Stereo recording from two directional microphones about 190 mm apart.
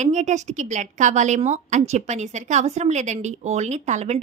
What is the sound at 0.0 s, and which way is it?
Speech, 40° right (ahead or behind).